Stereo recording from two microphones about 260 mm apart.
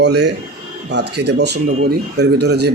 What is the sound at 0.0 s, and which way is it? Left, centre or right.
Speech, right.